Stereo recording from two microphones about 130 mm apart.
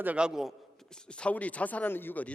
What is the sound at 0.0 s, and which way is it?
A man's voice, 10° right (ahead or behind).